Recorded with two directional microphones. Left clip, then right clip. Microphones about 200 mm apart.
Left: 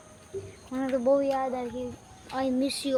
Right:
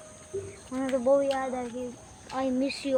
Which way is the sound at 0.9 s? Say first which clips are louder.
Even; 15° left (ahead or behind).